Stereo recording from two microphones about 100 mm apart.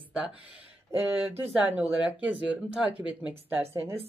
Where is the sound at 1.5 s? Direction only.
15° right (ahead or behind).